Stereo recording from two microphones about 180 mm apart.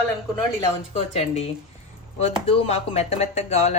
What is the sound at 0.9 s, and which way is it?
Speech, 35° left (ahead or behind).